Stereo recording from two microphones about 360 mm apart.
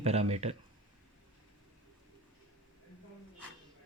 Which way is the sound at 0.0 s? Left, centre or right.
Centre.